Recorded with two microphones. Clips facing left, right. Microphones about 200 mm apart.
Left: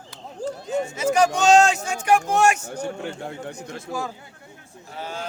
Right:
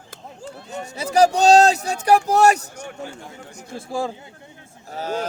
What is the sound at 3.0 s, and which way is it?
Speech, 65° left (ahead or behind).